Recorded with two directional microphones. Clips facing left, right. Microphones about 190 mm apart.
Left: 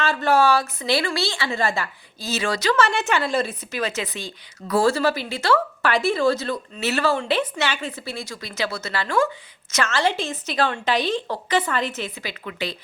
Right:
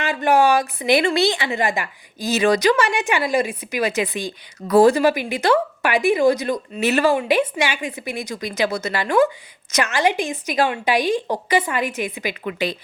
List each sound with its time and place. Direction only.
0.0 s a woman's voice: 15° right (ahead or behind)